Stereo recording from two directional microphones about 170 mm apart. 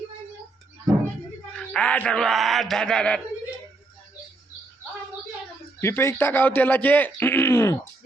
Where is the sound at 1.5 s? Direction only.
5° left (ahead or behind).